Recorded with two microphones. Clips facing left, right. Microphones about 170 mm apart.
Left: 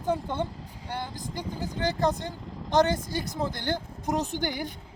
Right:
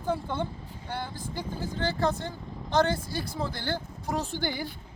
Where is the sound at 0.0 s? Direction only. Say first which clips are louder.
Left 2 dB; 15° left (ahead or behind).